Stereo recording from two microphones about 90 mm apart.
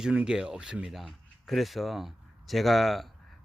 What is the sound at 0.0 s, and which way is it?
Speech, 10° right (ahead or behind).